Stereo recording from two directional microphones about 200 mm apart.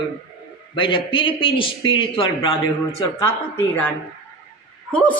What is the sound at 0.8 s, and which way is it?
A man's voice, 25° left (ahead or behind).